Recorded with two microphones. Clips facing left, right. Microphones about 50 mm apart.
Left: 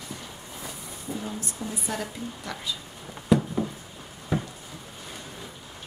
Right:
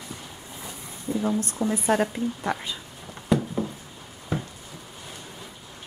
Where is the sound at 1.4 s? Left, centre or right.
Right.